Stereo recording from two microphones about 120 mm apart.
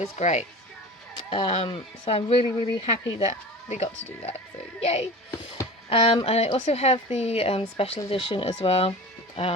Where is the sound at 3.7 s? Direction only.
75° left (ahead or behind).